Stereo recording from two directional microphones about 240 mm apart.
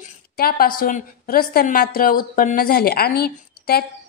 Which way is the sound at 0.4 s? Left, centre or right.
Left.